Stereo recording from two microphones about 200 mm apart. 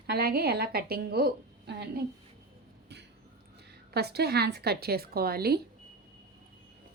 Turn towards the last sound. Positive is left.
turn(degrees=-50)  # may be behind; listen again after turning